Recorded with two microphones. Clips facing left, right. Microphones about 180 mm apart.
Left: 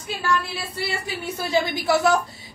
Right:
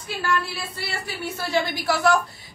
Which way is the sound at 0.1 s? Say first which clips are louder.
Left 1 dB; 20° left (ahead or behind).